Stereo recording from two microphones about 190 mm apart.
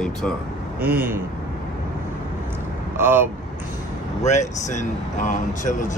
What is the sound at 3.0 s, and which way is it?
Speech, 10° right (ahead or behind).